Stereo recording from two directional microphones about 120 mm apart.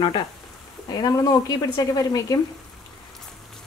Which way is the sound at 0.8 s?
30° left (ahead or behind).